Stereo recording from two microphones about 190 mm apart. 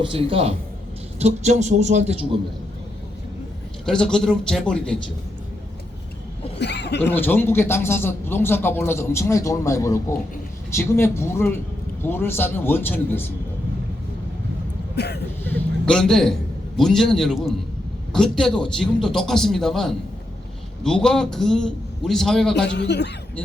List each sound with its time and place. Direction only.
0.0 s a woman's voice: 30° right (ahead or behind)
3.8 s a man's voice: 5° left (ahead or behind)
6.6 s speech: 65° left (ahead or behind)
7.1 s speech: 10° left (ahead or behind)
14.9 s speech: 60° left (ahead or behind)
15.4 s a sound: 5° left (ahead or behind)
16.7 s a man's voice: centre (ahead or behind)
22.6 s a man's voice: 65° left (ahead or behind)